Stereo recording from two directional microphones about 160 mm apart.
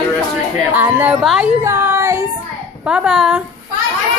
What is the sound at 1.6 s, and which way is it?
Child singing, 15° right (ahead or behind).